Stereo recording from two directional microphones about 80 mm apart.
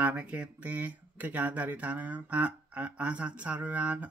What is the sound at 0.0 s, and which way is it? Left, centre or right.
Speech, centre.